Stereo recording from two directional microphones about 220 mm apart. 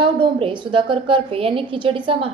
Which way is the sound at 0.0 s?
25° right (ahead or behind).